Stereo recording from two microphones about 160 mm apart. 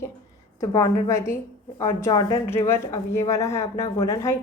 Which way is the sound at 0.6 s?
20° left (ahead or behind).